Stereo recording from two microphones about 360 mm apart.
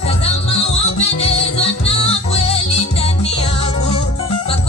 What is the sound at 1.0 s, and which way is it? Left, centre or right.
Music, centre.